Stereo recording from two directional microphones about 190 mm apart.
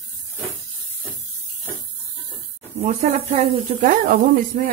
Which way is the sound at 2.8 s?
35° right (ahead or behind).